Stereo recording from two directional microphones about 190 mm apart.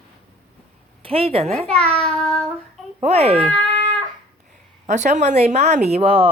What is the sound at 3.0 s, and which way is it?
Speech, 30° right (ahead or behind).